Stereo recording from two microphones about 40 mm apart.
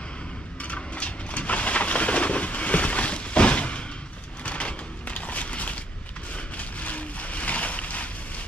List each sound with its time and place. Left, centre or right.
0.6 s vehicle: left
4.5 s a sound: left
6.3 s vehicle: left